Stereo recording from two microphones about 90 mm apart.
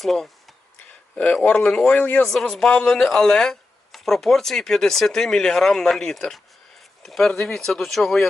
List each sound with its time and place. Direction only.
0.0 s a sound: centre (ahead or behind)
1.1 s speech: 15° left (ahead or behind)
2.2 s speech: 5° left (ahead or behind)